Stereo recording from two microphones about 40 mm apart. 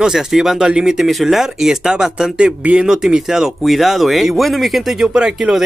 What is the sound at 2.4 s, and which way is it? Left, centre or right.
Speech, right.